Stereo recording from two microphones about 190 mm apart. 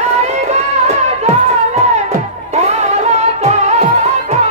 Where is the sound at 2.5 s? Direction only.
35° right (ahead or behind).